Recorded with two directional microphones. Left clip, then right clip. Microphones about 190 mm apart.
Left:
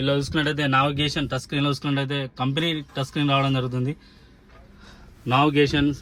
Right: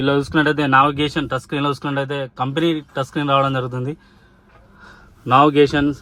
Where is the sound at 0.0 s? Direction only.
25° right (ahead or behind).